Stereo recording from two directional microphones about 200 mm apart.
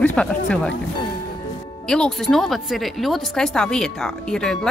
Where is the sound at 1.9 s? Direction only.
5° left (ahead or behind).